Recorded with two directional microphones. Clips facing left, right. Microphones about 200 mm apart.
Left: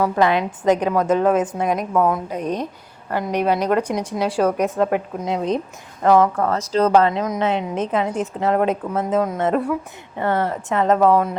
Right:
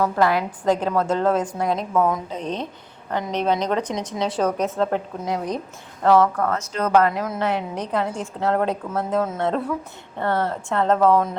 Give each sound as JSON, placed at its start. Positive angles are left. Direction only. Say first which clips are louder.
{"t": 0.0, "sound": "a woman's voice", "louder": "left 2 dB", "side_deg": 20}
{"t": 5.3, "sound": "a woman's voice", "louder": "left 4 dB", "side_deg": 20}
{"t": 6.5, "sound": "a woman's voice", "louder": "left 4 dB", "side_deg": 30}